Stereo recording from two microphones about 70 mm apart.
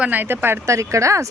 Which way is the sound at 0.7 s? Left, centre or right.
Right.